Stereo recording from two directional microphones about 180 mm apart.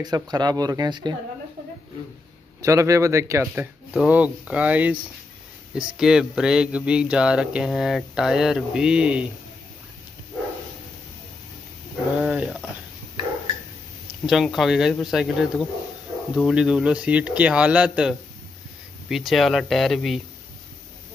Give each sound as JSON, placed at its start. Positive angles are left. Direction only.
{"t": 0.0, "sound": "speech", "side_deg": -20}
{"t": 2.6, "sound": "speech", "side_deg": -15}
{"t": 12.2, "sound": "a sound", "side_deg": -5}
{"t": 14.2, "sound": "speech", "side_deg": 0}